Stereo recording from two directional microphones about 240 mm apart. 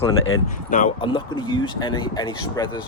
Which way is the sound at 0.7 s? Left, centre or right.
Left.